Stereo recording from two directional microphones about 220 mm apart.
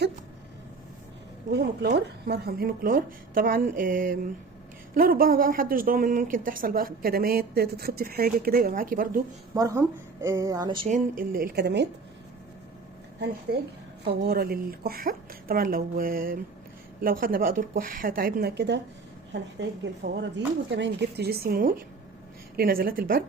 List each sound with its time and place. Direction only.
1.5 s a woman's voice: 50° right (ahead or behind)
9.6 s speech: 15° right (ahead or behind)
10.8 s a woman's voice: 35° right (ahead or behind)
13.5 s a woman's voice: 45° right (ahead or behind)